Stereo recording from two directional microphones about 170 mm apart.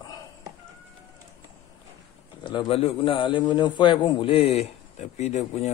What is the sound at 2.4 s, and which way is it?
A man's voice, 30° left (ahead or behind).